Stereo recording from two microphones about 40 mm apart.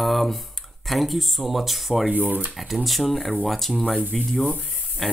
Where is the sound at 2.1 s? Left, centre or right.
Right.